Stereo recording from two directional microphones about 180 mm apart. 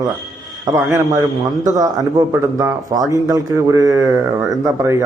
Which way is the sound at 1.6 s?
20° right (ahead or behind).